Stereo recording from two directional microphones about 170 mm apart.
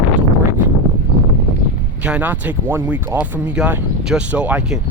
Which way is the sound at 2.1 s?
10° right (ahead or behind).